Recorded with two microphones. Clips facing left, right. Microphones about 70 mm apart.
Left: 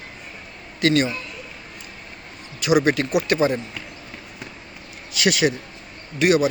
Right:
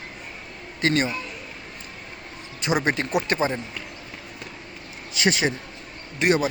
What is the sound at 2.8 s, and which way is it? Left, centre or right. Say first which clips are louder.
Speech: left 3 dB; right.